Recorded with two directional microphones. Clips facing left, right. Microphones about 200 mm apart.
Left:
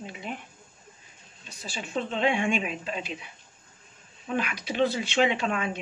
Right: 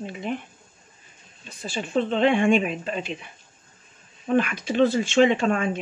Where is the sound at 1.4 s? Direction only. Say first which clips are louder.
Right 7 dB; 55° right (ahead or behind).